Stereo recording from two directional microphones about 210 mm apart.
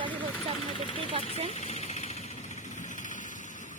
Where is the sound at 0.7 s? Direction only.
25° left (ahead or behind).